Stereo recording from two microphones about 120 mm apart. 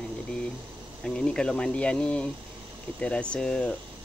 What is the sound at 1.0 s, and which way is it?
Speech, 5° left (ahead or behind).